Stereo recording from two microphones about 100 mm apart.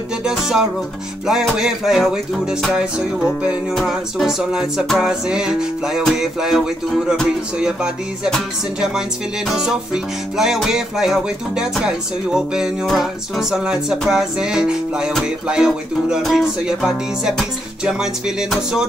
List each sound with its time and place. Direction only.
0.2 s music: 5° right (ahead or behind)
9.5 s music: 5° right (ahead or behind)